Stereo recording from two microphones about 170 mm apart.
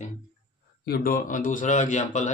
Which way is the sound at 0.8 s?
60° left (ahead or behind).